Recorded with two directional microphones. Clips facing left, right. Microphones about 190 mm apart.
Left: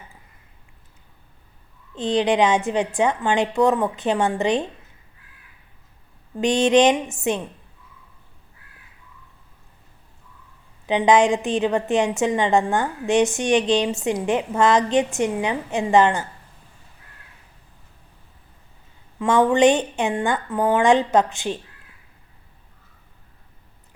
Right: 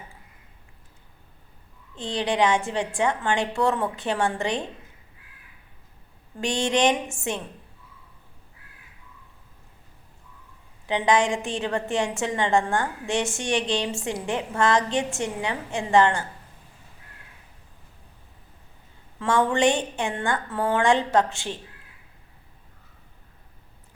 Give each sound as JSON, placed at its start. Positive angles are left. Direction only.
{"t": 2.0, "sound": "a woman's voice", "side_deg": 20}
{"t": 6.4, "sound": "a woman's voice", "side_deg": 20}
{"t": 10.8, "sound": "a woman's voice", "side_deg": 20}
{"t": 19.2, "sound": "a woman's voice", "side_deg": 20}